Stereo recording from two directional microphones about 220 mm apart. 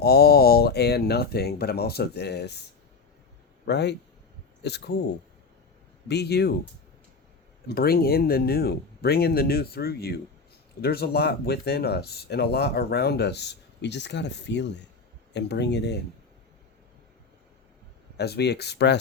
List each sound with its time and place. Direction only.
0.0 s speech: 45° left (ahead or behind)
3.7 s speech: 50° left (ahead or behind)
6.1 s speech: 50° left (ahead or behind)
7.7 s speech: 45° left (ahead or behind)
18.2 s speech: 50° left (ahead or behind)